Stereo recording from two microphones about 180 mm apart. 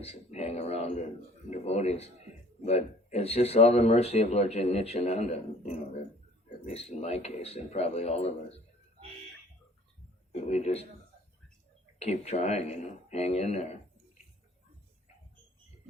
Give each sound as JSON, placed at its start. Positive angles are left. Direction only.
{"t": 0.0, "sound": "a sound", "side_deg": 35}
{"t": 1.5, "sound": "speech", "side_deg": 35}
{"t": 10.5, "sound": "speech", "side_deg": 35}
{"t": 11.9, "sound": "speech", "side_deg": 35}